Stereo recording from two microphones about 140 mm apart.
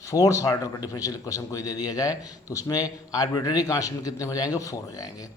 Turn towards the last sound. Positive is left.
turn(degrees=25)  # may be behind; listen again after turning